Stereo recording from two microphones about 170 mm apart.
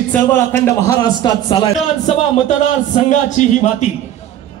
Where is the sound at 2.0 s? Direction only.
45° left (ahead or behind).